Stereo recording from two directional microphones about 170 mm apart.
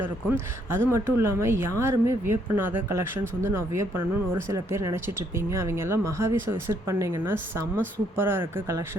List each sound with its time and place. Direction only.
0.3 s speech: 15° right (ahead or behind)